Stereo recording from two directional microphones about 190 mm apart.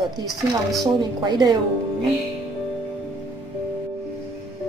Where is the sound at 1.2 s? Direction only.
20° right (ahead or behind).